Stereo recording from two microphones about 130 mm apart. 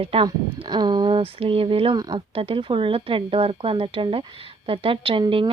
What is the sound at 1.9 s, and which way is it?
Speech, 30° right (ahead or behind).